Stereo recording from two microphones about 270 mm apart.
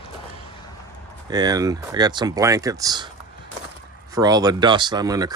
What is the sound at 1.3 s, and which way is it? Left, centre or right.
Speech, centre.